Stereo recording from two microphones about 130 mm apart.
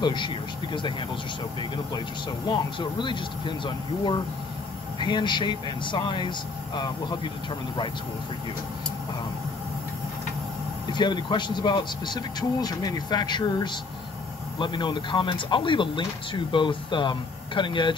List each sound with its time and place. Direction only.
0.0 s speech: 35° left (ahead or behind)
1.6 s speech: 35° left (ahead or behind)
10.9 s speech: 35° left (ahead or behind)